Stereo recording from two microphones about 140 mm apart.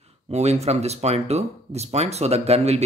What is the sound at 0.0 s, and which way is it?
Speech, 50° right (ahead or behind).